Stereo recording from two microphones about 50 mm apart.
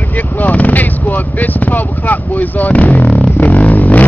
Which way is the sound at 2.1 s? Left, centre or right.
Left.